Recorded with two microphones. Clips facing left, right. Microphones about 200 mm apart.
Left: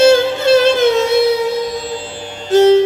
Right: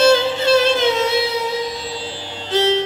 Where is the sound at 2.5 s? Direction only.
45° left (ahead or behind).